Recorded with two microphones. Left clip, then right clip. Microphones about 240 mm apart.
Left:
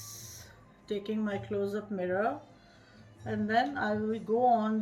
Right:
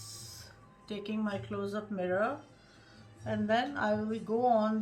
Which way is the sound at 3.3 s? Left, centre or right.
Centre.